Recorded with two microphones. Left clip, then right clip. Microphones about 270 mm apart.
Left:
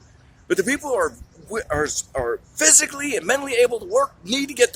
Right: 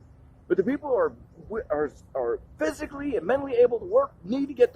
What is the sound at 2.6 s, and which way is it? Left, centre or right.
Speech, centre.